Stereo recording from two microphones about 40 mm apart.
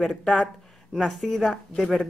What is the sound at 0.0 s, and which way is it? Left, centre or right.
Speech, centre.